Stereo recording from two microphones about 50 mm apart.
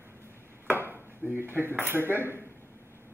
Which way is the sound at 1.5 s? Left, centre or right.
Right.